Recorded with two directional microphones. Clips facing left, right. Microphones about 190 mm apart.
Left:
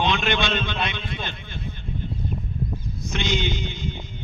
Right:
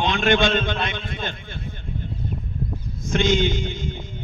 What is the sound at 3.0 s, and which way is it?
A man's voice, 50° right (ahead or behind).